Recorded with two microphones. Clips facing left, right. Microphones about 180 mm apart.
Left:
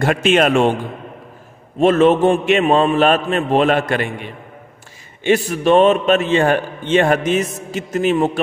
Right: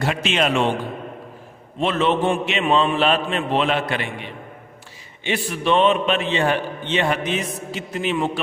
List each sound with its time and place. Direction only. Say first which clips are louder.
0.0 s a man's voice: left 7 dB; 50° left (ahead or behind)
1.8 s a man's voice: left 8 dB; 45° left (ahead or behind)